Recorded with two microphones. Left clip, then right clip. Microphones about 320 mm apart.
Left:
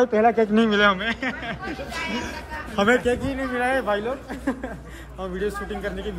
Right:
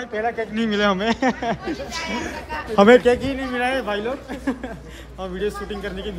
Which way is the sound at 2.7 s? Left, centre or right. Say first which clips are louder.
Right 7 dB; right.